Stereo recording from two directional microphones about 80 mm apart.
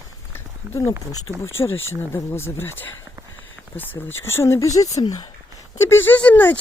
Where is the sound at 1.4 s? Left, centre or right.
Left.